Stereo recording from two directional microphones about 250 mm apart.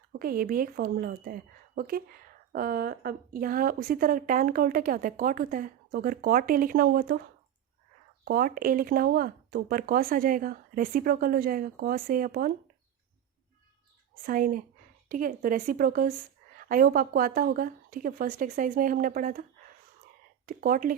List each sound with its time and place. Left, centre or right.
0.1 s a woman's voice: right
8.2 s a woman's voice: right
14.3 s a woman's voice: right
20.5 s a woman's voice: right